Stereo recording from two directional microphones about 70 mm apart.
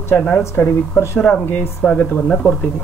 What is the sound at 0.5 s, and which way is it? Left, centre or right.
Speech, left.